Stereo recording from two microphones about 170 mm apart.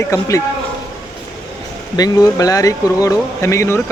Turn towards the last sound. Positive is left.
turn(degrees=15)  # may be behind; listen again after turning